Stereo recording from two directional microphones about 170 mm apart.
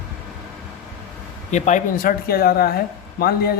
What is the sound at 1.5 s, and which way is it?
A woman's voice, 45° left (ahead or behind).